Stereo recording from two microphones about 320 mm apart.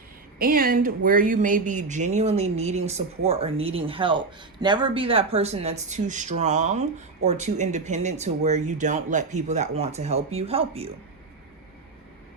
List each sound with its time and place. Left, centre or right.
0.3 s speech: right